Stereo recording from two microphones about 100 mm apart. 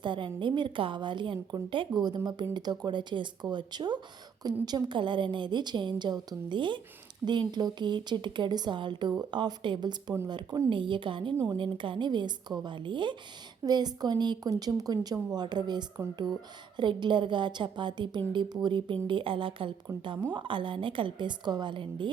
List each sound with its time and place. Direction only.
0.0 s a woman's voice: 55° right (ahead or behind)